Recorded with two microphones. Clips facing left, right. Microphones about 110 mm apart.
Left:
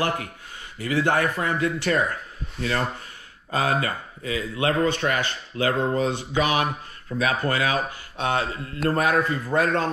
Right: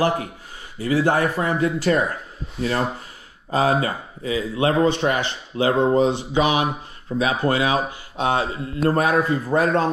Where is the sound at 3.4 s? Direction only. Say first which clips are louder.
Right 4 dB; 25° right (ahead or behind).